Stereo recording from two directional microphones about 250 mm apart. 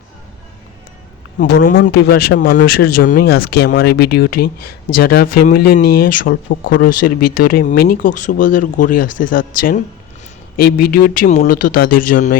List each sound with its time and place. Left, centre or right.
1.4 s speech: left
6.9 s speech: left
7.3 s speech: left